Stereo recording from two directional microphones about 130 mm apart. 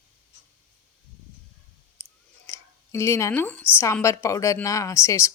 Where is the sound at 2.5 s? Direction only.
20° left (ahead or behind).